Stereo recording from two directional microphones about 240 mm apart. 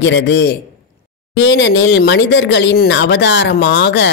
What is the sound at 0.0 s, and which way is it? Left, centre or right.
Speech, left.